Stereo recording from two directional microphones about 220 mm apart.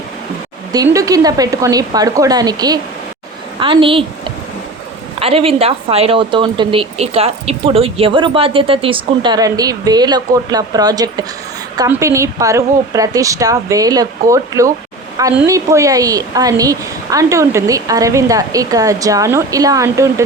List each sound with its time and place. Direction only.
0.7 s a woman's voice: 15° right (ahead or behind)